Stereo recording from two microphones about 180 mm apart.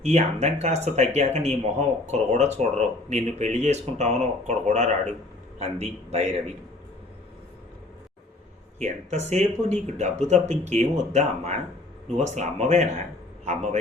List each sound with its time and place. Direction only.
0.0 s speech: 40° right (ahead or behind)
8.8 s a man's voice: 40° right (ahead or behind)